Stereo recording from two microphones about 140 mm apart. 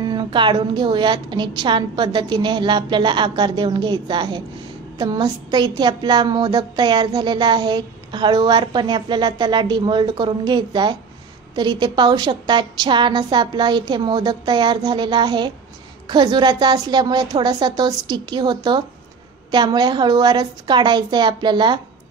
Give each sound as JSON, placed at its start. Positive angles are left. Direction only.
{"t": 0.0, "sound": "a woman's voice", "side_deg": -30}